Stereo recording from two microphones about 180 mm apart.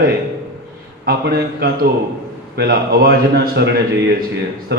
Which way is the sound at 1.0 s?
60° right (ahead or behind).